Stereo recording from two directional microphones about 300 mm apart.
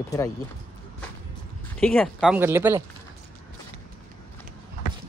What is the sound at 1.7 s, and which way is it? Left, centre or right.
Speech, centre.